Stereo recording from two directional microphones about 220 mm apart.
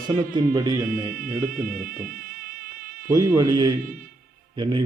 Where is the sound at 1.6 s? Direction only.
40° right (ahead or behind).